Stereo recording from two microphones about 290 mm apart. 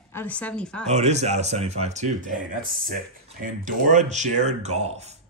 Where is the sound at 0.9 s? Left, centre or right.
Right.